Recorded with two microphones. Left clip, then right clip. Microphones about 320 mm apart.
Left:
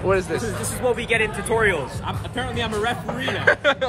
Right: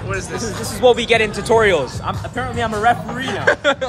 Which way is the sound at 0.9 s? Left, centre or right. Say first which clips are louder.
Right 3 dB; right.